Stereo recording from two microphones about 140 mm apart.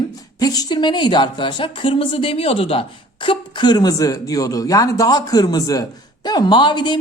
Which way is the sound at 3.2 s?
30° left (ahead or behind).